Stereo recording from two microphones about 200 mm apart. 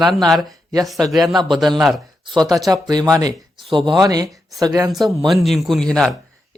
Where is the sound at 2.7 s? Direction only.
20° right (ahead or behind).